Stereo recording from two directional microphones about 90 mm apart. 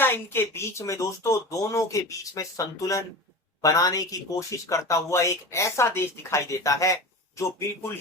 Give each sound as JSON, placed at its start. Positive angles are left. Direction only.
{"t": 0.0, "sound": "speech", "side_deg": 25}